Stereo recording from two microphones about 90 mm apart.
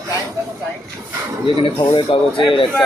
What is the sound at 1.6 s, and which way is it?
Speech, 75° left (ahead or behind).